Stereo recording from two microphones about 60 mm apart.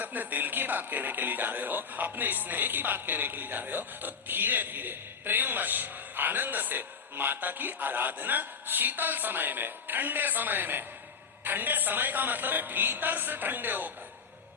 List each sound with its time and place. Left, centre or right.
0.0 s speech: right